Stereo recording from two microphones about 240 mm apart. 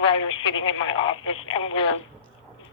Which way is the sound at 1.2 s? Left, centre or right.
Left.